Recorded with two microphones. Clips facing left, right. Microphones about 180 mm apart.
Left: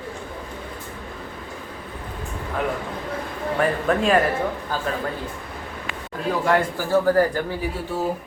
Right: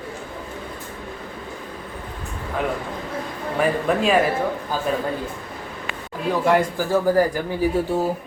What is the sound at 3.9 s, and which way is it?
Speech, 5° right (ahead or behind).